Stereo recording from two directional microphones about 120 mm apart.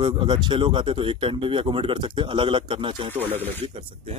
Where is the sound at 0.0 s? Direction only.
40° right (ahead or behind).